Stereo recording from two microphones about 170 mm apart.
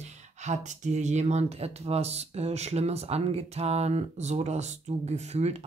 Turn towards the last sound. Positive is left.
turn(degrees=-40)  # may be behind; listen again after turning